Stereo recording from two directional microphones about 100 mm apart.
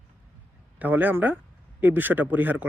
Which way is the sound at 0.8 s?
15° right (ahead or behind).